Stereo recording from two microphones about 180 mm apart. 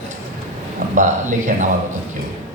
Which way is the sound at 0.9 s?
45° right (ahead or behind).